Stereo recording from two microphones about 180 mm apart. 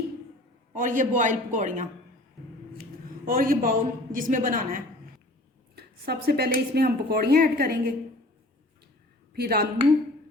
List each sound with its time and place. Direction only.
0.7 s a woman's voice: 45° right (ahead or behind)
3.2 s a woman's voice: 50° right (ahead or behind)
5.7 s a woman's voice: 60° right (ahead or behind)
9.3 s speech: 60° right (ahead or behind)